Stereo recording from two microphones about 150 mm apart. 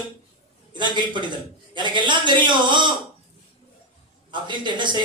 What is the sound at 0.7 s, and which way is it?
A man's voice, 30° right (ahead or behind).